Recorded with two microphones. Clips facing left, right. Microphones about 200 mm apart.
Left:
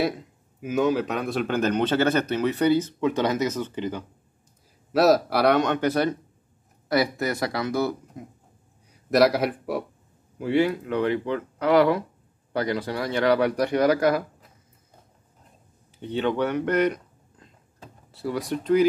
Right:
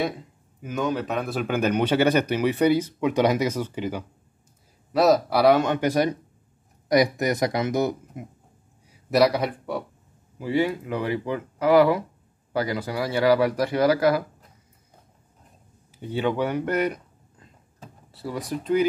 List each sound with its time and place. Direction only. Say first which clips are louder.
0.6 s speech: left 4 dB; 5° left (ahead or behind)
4.9 s speech: even; centre (ahead or behind); by 8.0 s 20° right (ahead or behind)
9.1 s speech: left 1 dB; centre (ahead or behind)
13.7 s speech: right 1 dB; 30° right (ahead or behind)
16.0 s speech: even; 10° right (ahead or behind)
18.1 s speech: left 2 dB; centre (ahead or behind)